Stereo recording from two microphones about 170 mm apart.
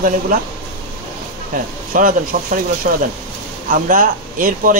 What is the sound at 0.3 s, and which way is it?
Speech, 50° right (ahead or behind).